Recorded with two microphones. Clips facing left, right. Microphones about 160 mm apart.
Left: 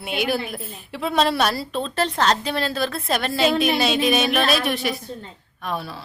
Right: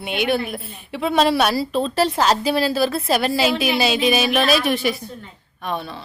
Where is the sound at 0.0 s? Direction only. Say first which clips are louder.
Right 3 dB; centre (ahead or behind).